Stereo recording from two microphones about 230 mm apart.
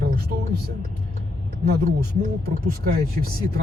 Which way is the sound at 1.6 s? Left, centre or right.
Right.